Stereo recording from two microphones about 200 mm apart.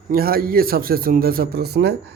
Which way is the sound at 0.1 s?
50° right (ahead or behind).